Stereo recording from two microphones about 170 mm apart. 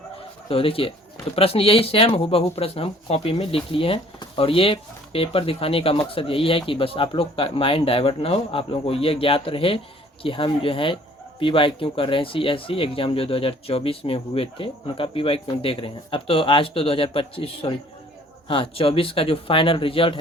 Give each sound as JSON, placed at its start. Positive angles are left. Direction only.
{"t": 0.4, "sound": "speech", "side_deg": 30}